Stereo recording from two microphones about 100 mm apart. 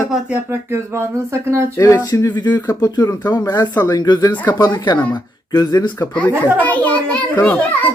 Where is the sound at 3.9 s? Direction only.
45° left (ahead or behind).